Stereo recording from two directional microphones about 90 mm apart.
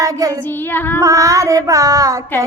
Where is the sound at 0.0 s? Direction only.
40° right (ahead or behind).